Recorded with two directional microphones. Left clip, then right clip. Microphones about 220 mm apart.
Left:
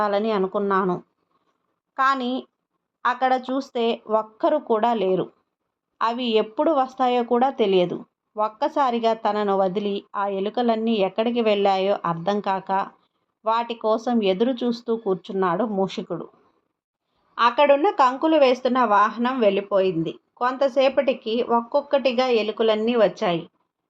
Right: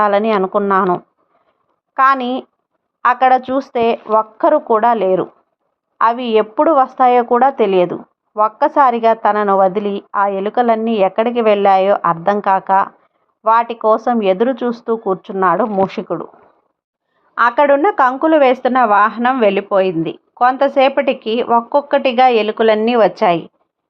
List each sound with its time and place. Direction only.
0.0 s a woman's voice: 15° right (ahead or behind)
17.3 s a woman's voice: 30° right (ahead or behind)